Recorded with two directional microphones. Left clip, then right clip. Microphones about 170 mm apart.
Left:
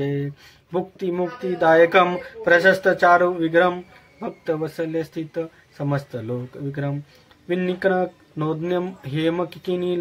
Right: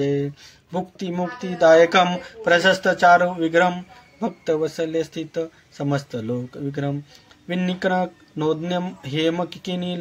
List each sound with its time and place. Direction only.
0.0 s speech: 25° right (ahead or behind)
7.4 s speech: 30° right (ahead or behind)